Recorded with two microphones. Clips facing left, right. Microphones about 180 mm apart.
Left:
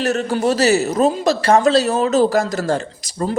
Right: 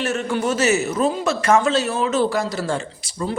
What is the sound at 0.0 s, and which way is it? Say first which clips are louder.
A woman's voice: left 4 dB; 35° left (ahead or behind).